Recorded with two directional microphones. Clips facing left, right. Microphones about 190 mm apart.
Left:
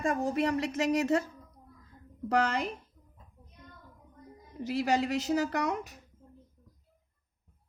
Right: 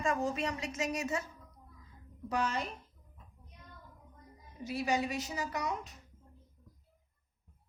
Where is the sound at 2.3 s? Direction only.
85° left.